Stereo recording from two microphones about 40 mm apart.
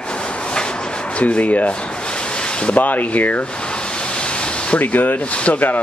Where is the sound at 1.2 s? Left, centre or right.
Left.